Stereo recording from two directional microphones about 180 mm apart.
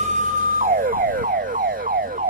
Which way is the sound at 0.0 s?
45° right (ahead or behind).